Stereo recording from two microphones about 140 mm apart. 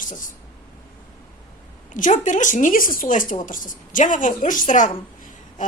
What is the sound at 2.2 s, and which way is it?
A woman's voice, 65° left (ahead or behind).